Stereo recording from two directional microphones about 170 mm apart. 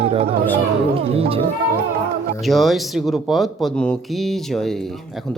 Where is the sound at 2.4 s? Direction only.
Centre (ahead or behind).